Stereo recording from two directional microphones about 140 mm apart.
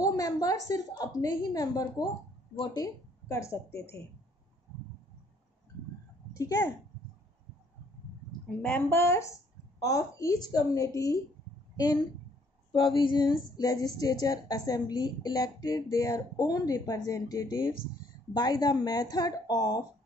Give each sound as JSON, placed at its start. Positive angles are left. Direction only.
{"t": 0.0, "sound": "speech", "side_deg": 25}
{"t": 6.3, "sound": "a child's voice", "side_deg": 20}
{"t": 8.6, "sound": "a woman's voice", "side_deg": 10}